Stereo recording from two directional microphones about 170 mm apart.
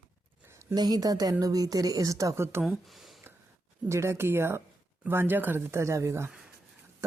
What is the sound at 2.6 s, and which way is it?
Speech, centre (ahead or behind).